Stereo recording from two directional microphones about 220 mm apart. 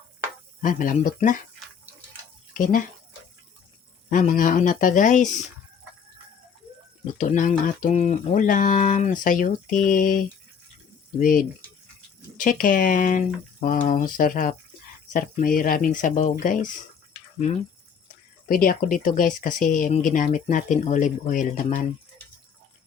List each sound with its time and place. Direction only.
0.6 s speech: 35° left (ahead or behind)
2.5 s speech: 40° left (ahead or behind)
4.1 s speech: 35° left (ahead or behind)
7.2 s speech: 35° left (ahead or behind)
12.4 s speech: 40° left (ahead or behind)
18.4 s speech: 40° left (ahead or behind)